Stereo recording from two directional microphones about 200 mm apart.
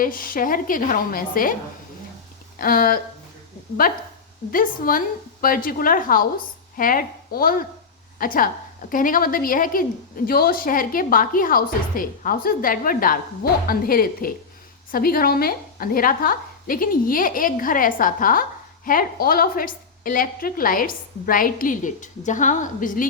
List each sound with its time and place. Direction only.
0.0 s a woman's voice: 45° left (ahead or behind)
2.6 s a woman's voice: 45° left (ahead or behind)